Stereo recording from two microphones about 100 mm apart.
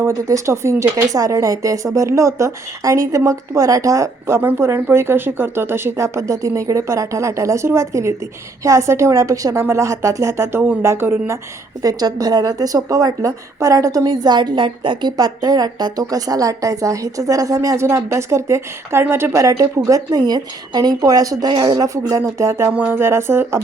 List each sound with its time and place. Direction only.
0.1 s speech: 30° right (ahead or behind)
11.8 s speech: 40° right (ahead or behind)